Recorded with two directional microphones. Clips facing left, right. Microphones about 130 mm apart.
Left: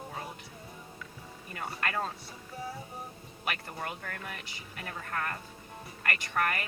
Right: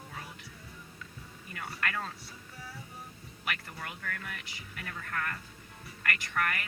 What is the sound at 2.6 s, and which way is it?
Music, 25° left (ahead or behind).